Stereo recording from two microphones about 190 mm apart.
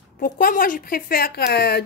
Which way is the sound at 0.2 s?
45° left (ahead or behind).